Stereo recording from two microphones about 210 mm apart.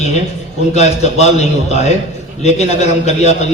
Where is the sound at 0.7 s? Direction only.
30° left (ahead or behind).